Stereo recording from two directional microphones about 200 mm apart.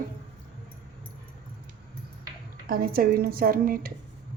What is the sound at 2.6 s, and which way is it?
A woman's voice, 45° right (ahead or behind).